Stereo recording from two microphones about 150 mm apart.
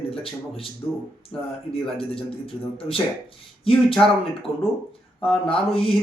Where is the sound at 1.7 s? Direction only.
35° left (ahead or behind).